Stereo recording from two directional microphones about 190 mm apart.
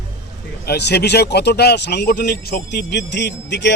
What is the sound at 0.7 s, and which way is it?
Speech, 60° left (ahead or behind).